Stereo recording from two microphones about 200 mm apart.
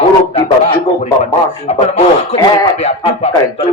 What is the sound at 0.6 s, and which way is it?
Speech, 25° left (ahead or behind).